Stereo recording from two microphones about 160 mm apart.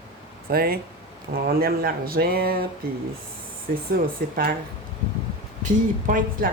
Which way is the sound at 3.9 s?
65° right (ahead or behind).